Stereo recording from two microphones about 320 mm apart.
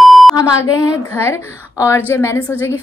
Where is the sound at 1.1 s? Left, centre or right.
Centre.